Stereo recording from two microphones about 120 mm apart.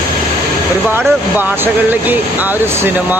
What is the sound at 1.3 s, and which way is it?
Speech, 15° right (ahead or behind).